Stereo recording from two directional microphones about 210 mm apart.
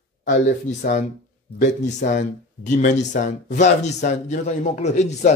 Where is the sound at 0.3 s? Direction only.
35° left (ahead or behind).